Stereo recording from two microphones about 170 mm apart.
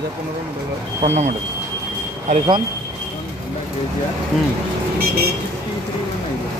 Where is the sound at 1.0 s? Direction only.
40° right (ahead or behind).